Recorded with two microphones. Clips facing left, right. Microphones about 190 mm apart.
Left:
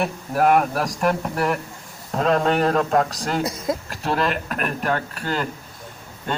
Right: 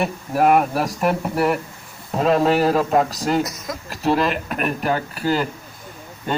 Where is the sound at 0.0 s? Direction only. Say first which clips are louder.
Right 1 dB; centre (ahead or behind).